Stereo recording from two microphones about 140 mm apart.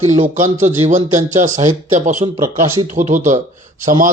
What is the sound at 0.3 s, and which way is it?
Speech, 60° right (ahead or behind).